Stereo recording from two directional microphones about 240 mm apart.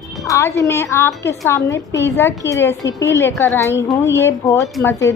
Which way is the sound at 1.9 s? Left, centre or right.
Left.